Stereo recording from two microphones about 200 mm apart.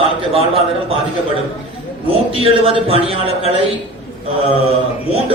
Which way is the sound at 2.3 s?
30° right (ahead or behind).